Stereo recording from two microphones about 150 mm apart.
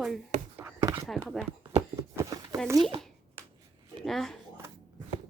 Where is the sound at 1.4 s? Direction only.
Centre (ahead or behind).